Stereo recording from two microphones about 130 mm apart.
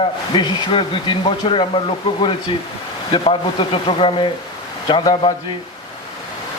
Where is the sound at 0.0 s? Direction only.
35° left (ahead or behind).